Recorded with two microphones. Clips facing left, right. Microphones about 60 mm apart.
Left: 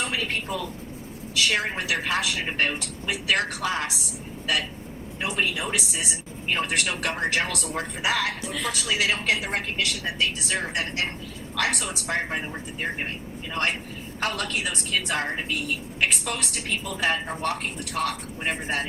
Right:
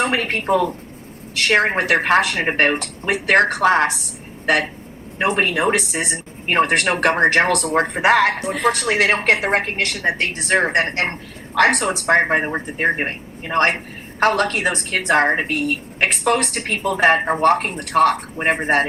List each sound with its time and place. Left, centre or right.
0.0 s a woman's voice: right